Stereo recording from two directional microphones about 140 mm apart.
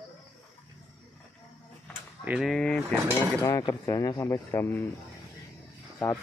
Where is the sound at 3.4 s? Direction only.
25° left (ahead or behind).